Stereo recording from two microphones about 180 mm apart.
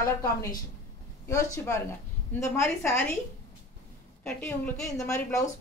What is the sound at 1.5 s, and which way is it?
A woman's voice, 15° left (ahead or behind).